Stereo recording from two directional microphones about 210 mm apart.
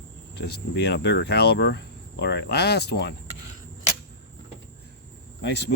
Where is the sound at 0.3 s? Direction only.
55° left (ahead or behind).